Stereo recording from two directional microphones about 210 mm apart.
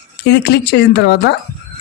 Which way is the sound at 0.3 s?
50° left (ahead or behind).